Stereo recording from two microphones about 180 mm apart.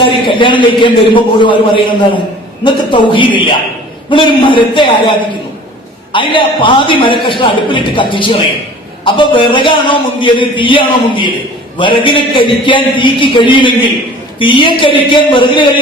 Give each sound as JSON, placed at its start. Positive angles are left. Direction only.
{"t": 0.0, "sound": "a man's voice", "side_deg": 25}
{"t": 6.1, "sound": "a man's voice", "side_deg": 30}